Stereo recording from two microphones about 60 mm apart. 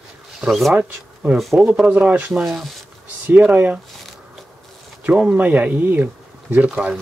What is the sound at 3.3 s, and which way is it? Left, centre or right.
Speech, right.